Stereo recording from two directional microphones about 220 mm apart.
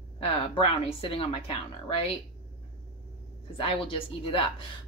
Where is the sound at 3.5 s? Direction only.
25° left (ahead or behind).